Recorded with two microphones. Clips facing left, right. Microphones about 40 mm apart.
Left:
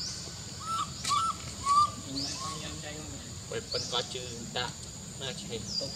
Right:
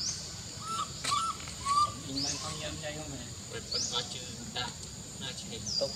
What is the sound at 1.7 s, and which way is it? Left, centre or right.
Bird, centre.